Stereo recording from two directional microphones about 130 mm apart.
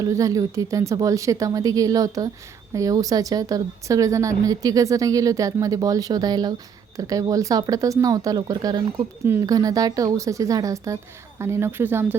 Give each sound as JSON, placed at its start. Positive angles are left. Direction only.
{"t": 0.0, "sound": "a woman's voice", "side_deg": -25}